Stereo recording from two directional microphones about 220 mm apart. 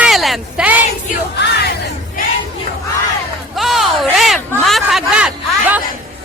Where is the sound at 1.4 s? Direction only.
50° left (ahead or behind).